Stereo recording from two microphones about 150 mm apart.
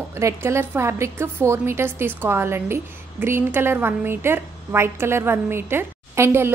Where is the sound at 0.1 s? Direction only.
20° right (ahead or behind).